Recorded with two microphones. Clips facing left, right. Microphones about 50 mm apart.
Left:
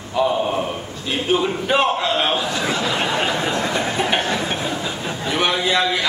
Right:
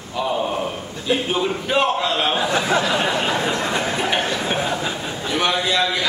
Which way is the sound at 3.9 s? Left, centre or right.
Centre.